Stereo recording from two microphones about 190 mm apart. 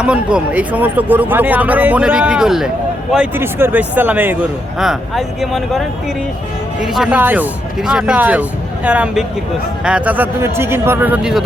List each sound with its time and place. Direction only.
0.0 s a man's voice: 5° right (ahead or behind)
6.8 s a man's voice: centre (ahead or behind)